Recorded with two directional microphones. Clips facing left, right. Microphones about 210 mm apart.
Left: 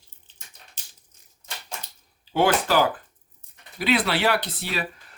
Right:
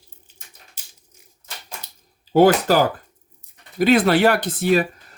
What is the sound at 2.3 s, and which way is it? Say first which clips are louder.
Speech: right 6 dB; 40° right (ahead or behind).